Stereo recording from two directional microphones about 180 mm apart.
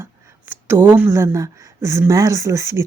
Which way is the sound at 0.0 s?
15° right (ahead or behind).